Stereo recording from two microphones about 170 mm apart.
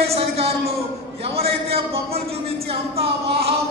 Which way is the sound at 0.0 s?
35° right (ahead or behind).